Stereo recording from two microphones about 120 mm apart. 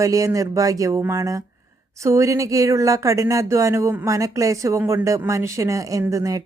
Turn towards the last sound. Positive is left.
turn(degrees=-30)  # may be behind; listen again after turning